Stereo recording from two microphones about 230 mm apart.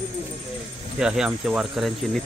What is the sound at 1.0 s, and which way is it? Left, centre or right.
Speech, centre.